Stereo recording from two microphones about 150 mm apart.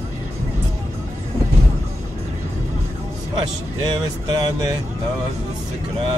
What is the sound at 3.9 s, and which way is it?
Speech, 30° right (ahead or behind).